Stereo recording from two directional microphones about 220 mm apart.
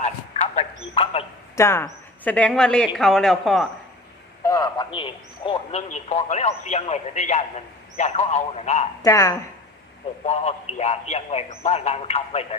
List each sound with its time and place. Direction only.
0.0 s a sound: 30° left (ahead or behind)
1.5 s speech: 10° left (ahead or behind)
4.4 s a sound: 15° left (ahead or behind)
4.9 s a man's voice: 25° left (ahead or behind)
9.0 s speech: 15° left (ahead or behind)
10.2 s speech: 30° left (ahead or behind)